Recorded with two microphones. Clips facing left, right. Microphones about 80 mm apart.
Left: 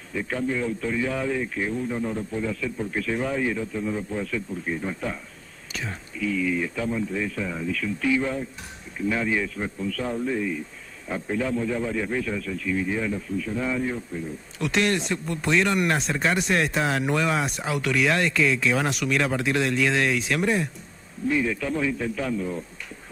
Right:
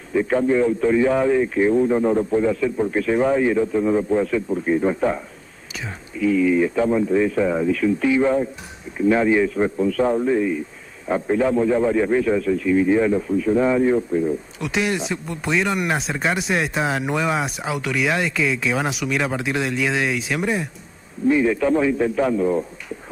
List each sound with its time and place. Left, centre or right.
0.1 s a man's voice: right
1.8 s a man's voice: right
5.7 s whispering: centre
6.2 s a man's voice: right
14.6 s speech: centre
21.3 s a man's voice: right